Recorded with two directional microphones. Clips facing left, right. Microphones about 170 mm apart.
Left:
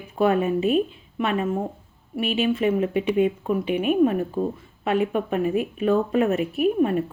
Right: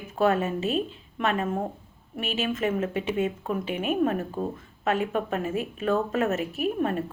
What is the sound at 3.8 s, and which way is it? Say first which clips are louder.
Speech: left 5 dB; 40° right (ahead or behind).